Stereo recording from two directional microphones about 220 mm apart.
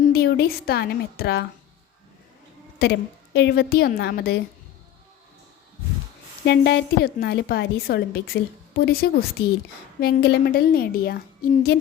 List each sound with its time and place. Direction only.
0.0 s a woman's voice: 50° left (ahead or behind)
2.7 s a woman's voice: 50° left (ahead or behind)
6.4 s a woman's voice: 50° left (ahead or behind)